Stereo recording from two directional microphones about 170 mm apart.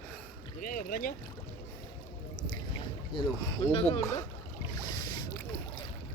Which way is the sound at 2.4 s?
25° left (ahead or behind).